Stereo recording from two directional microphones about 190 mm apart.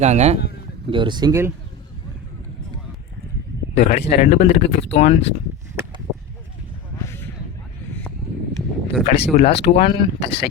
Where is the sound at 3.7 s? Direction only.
35° left (ahead or behind).